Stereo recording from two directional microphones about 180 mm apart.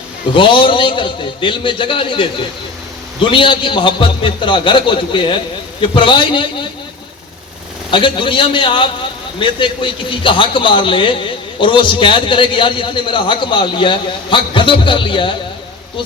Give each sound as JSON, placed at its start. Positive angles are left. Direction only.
{"t": 0.3, "sound": "a man's voice", "side_deg": 25}
{"t": 3.2, "sound": "a man's voice", "side_deg": 30}
{"t": 7.9, "sound": "a man's voice", "side_deg": 30}